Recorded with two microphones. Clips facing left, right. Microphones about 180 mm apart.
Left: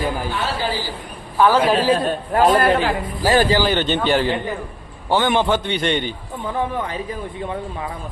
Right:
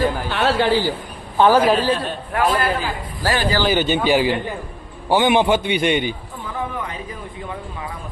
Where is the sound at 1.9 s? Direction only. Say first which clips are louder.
Left 4 dB; 35° left (ahead or behind).